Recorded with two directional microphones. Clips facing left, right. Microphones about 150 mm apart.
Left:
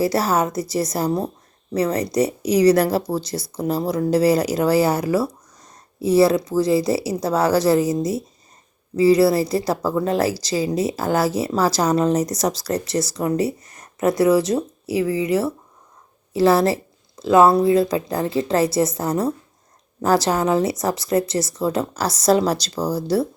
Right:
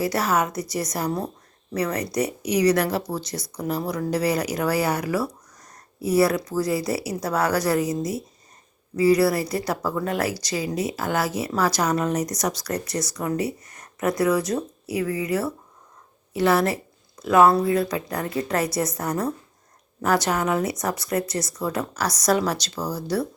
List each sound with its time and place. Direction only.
0.0 s a woman's voice: 30° left (ahead or behind)